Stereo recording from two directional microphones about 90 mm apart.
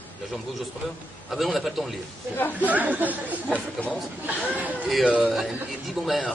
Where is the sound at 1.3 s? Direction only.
Centre (ahead or behind).